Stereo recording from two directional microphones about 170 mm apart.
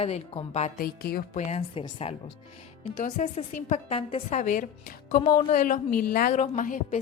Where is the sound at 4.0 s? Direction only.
35° left (ahead or behind).